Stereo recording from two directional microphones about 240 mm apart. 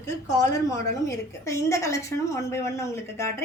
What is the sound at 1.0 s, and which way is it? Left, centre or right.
A woman's voice, centre.